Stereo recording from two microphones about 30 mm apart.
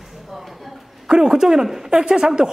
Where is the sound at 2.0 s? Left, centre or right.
Right.